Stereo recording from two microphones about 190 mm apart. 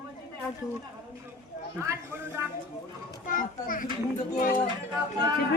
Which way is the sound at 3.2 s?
45° left (ahead or behind).